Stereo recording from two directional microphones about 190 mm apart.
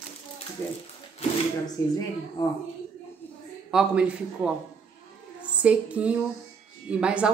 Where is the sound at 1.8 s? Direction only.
90° left.